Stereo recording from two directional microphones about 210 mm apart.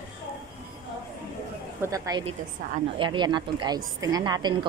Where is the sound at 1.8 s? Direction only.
15° right (ahead or behind).